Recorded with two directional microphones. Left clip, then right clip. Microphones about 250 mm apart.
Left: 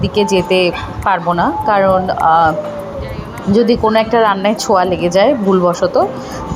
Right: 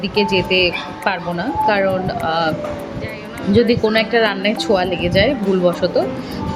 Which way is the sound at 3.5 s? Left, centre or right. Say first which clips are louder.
Left 3 dB; centre.